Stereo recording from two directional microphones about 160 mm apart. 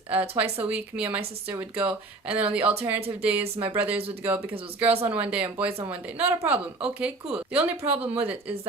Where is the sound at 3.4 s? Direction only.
40° right (ahead or behind).